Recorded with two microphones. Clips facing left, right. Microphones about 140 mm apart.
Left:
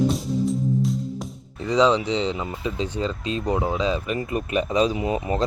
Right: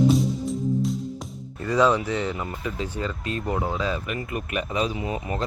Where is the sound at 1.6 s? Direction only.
15° left (ahead or behind).